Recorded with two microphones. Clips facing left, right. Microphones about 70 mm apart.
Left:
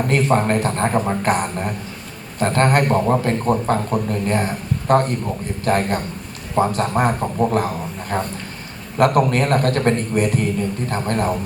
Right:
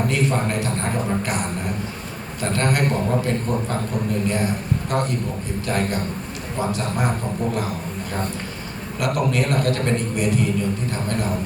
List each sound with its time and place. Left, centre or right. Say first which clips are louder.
0.1 s a man's voice: left 5 dB; left
2.4 s a man's voice: left 5 dB; left
9.0 s a man's voice: left 6 dB; left